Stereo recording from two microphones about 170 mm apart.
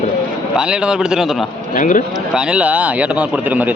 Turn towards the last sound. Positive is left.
turn(degrees=-10)  # may be behind; listen again after turning